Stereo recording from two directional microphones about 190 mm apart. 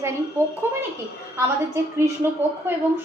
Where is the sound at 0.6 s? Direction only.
10° right (ahead or behind).